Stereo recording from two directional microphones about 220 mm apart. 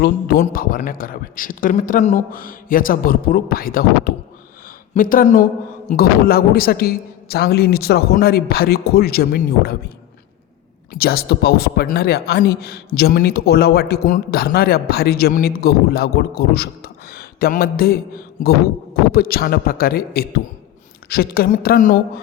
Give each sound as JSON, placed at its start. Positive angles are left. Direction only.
{"t": 0.0, "sound": "a man's voice", "side_deg": 40}
{"t": 10.9, "sound": "speech", "side_deg": 45}